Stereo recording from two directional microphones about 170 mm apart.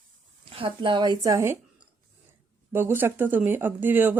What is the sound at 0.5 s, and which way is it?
A woman's voice, 30° right (ahead or behind).